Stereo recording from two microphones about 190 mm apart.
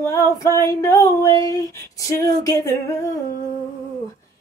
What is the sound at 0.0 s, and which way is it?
Female singing, 15° left (ahead or behind).